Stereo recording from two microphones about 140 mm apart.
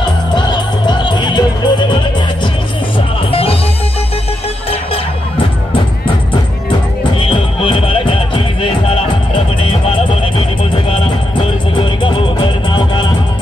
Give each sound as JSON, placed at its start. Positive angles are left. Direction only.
{"t": 0.3, "sound": "music", "side_deg": 30}
{"t": 3.3, "sound": "music", "side_deg": 40}
{"t": 7.2, "sound": "music", "side_deg": 40}
{"t": 11.7, "sound": "music", "side_deg": 35}